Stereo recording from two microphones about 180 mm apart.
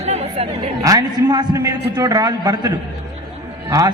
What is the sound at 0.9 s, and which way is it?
A man's voice, 20° right (ahead or behind).